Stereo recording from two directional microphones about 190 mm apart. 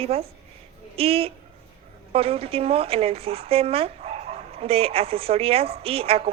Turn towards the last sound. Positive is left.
turn(degrees=-30)  # may be behind; listen again after turning